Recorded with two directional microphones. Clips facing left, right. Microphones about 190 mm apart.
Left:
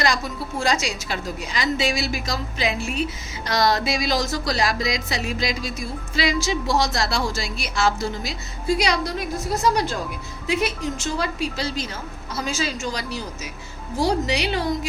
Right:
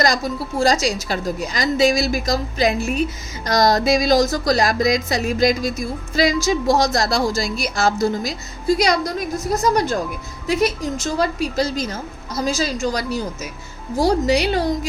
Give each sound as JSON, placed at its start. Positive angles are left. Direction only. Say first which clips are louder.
{"t": 0.6, "sound": "a woman's voice", "louder": "right 6 dB", "side_deg": -35}